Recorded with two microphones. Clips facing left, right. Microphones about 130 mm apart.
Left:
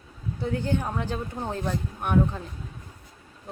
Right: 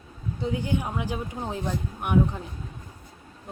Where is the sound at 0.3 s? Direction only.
15° right (ahead or behind).